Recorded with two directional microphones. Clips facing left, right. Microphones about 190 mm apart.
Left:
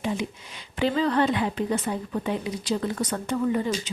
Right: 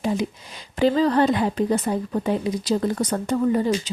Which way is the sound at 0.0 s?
40° right (ahead or behind).